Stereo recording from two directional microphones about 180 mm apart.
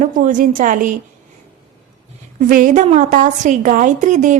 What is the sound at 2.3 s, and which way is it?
A woman's voice, 45° right (ahead or behind).